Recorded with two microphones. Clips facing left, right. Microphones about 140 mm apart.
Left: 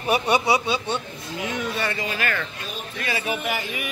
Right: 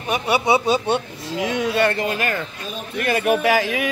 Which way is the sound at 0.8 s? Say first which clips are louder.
Right 6 dB; 75° right (ahead or behind).